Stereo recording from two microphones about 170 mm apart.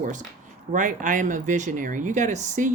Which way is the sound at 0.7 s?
50° right (ahead or behind).